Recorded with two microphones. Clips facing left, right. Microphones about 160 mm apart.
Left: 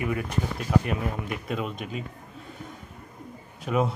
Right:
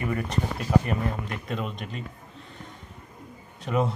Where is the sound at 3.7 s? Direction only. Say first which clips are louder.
Even; centre (ahead or behind).